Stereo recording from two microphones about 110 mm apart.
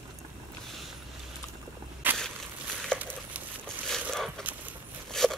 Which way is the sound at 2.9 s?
10° left (ahead or behind).